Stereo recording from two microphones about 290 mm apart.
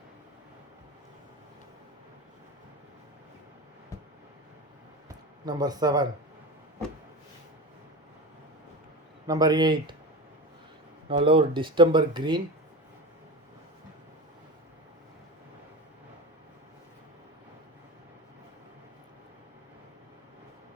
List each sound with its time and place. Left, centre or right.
5.0 s a sound: centre
9.2 s speech: centre
11.1 s speech: centre